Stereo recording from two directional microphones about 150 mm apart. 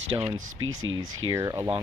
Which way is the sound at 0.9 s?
25° right (ahead or behind).